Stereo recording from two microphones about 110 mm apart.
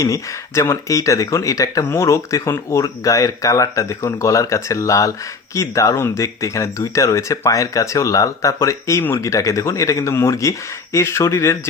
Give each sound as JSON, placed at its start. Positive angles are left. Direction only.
{"t": 0.0, "sound": "speech", "side_deg": 30}